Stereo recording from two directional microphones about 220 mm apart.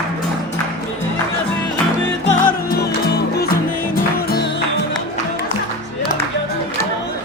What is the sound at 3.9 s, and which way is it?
Music, 45° left (ahead or behind).